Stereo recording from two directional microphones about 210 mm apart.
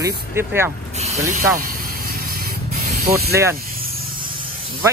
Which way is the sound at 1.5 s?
40° right (ahead or behind).